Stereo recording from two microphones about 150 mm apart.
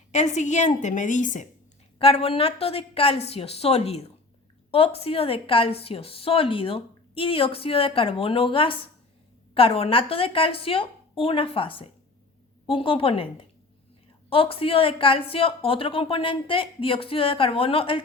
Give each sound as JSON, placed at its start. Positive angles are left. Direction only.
{"t": 0.1, "sound": "a woman's voice", "side_deg": 50}
{"t": 2.0, "sound": "a woman's voice", "side_deg": 40}